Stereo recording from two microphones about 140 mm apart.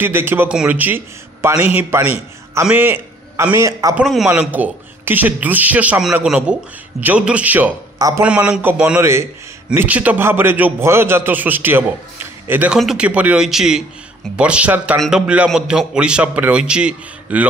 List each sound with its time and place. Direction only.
0.0 s a man's voice: 15° right (ahead or behind)
3.9 s a man's voice: 5° right (ahead or behind)